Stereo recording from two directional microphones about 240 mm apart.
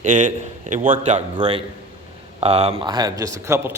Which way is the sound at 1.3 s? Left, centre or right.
Centre.